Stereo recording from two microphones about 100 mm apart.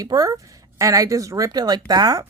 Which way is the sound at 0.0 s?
40° right (ahead or behind).